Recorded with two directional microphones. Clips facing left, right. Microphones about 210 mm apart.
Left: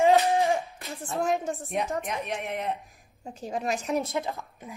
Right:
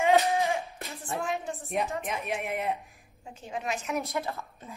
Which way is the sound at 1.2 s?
40° left (ahead or behind).